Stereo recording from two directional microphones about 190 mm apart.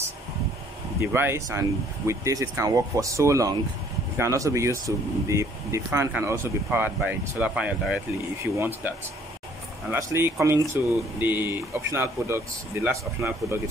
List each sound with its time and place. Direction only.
1.0 s speech: 10° right (ahead or behind)